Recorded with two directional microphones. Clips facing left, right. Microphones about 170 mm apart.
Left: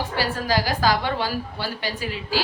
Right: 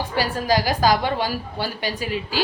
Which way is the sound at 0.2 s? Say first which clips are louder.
Right 3 dB; 15° right (ahead or behind).